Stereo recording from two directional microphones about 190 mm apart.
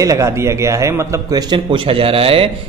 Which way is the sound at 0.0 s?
15° right (ahead or behind).